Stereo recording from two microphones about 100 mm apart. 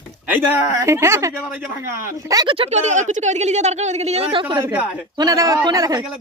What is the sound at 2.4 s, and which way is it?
Speech, 65° right (ahead or behind).